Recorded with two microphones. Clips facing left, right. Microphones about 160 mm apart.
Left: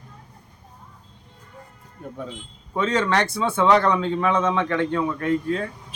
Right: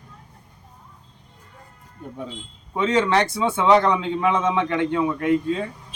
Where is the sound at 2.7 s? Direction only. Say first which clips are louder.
Right 2 dB; 15° right (ahead or behind).